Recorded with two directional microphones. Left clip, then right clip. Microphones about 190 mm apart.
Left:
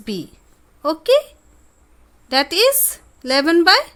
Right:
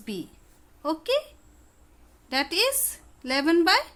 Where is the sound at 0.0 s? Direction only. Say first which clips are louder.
Left 8 dB; 40° left (ahead or behind).